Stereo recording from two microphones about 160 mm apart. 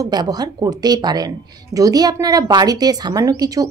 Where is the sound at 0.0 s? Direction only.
25° right (ahead or behind).